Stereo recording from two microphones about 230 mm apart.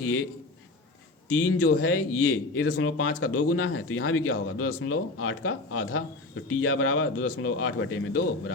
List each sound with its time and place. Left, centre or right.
0.0 s a man's voice: left
1.3 s a man's voice: left